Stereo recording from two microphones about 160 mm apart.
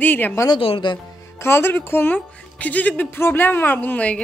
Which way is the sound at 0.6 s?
30° left (ahead or behind).